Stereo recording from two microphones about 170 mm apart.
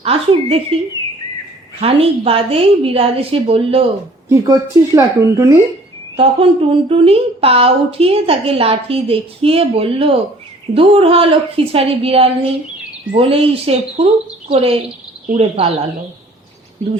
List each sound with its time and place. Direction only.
0.0 s a woman's voice: 35° right (ahead or behind)
1.8 s a woman's voice: 35° right (ahead or behind)
4.3 s speech: 20° right (ahead or behind)
6.1 s a woman's voice: 35° right (ahead or behind)